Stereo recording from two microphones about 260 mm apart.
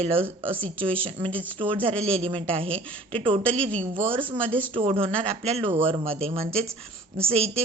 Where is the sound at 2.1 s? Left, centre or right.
Right.